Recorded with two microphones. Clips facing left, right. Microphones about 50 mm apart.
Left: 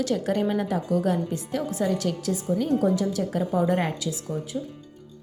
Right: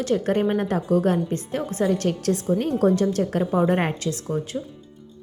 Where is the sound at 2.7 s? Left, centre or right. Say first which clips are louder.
Right 6 dB; right.